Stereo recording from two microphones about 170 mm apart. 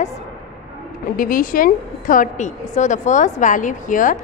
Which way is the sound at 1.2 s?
55° left (ahead or behind).